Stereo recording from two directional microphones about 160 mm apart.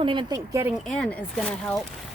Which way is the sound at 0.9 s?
5° left (ahead or behind).